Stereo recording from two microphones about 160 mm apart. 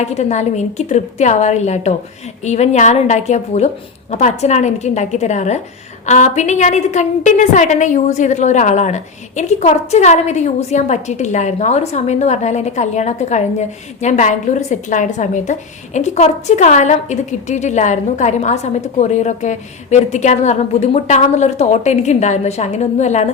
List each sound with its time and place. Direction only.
0.0 s a woman's voice: 45° left (ahead or behind)